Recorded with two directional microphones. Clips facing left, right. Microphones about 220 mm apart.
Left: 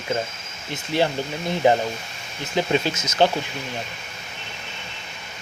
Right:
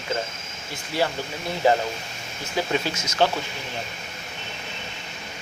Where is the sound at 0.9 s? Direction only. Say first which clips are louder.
Left 3 dB; 20° left (ahead or behind).